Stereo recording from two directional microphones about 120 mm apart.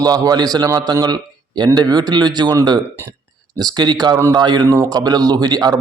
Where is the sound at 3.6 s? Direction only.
35° right (ahead or behind).